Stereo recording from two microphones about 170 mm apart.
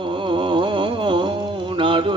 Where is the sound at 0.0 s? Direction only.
30° right (ahead or behind).